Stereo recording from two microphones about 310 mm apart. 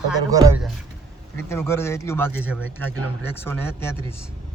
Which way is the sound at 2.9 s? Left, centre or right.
Right.